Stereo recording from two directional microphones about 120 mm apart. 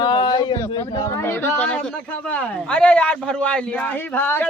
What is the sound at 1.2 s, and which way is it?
A man's voice, 20° left (ahead or behind).